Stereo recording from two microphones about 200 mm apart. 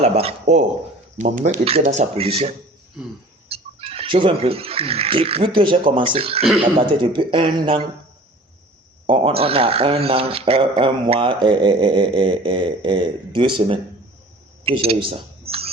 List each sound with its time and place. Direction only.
0.0 s speech: 30° right (ahead or behind)
3.5 s speech: 30° right (ahead or behind)
9.0 s speech: 30° right (ahead or behind)
14.6 s a sound: 30° right (ahead or behind)